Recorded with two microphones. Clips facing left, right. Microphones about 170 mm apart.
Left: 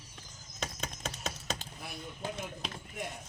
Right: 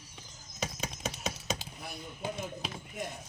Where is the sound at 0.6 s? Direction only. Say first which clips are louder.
Right 3 dB; 5° right (ahead or behind).